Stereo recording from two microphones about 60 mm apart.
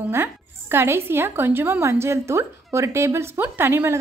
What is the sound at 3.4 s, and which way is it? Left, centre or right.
Speech, right.